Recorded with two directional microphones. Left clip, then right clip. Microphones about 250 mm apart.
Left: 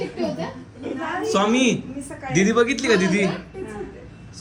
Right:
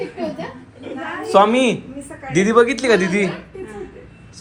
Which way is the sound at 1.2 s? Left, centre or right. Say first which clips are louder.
Right 7 dB; centre.